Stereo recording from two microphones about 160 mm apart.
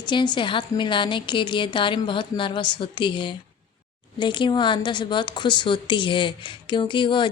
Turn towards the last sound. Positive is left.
turn(degrees=30)  # may be behind; listen again after turning